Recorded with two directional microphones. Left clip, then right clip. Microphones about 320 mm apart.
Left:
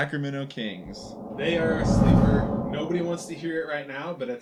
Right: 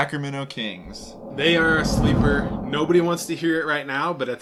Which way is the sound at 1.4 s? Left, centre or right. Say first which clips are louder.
Right 7 dB; right.